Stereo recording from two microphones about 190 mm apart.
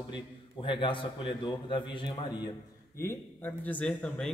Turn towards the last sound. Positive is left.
turn(degrees=5)  # may be behind; listen again after turning